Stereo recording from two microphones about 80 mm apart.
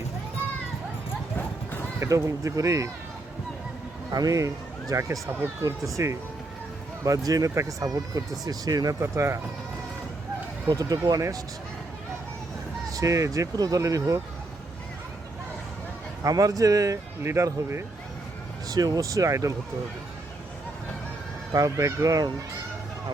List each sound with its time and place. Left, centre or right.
2.0 s speech: right
4.1 s speech: right
7.3 s speech: right
9.0 s speech: right
10.7 s speech: right
12.9 s speech: right
16.2 s speech: right
17.2 s speech: right
18.7 s speech: right
21.5 s speech: right